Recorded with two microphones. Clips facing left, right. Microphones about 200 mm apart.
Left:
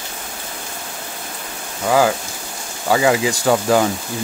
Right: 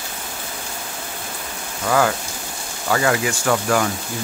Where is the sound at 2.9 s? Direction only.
15° left (ahead or behind).